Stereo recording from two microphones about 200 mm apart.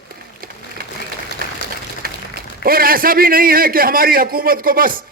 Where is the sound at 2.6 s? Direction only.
45° right (ahead or behind).